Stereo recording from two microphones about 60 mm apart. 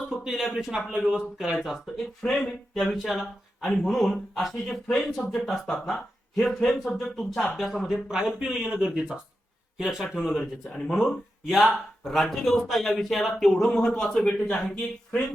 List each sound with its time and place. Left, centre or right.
0.3 s speech: centre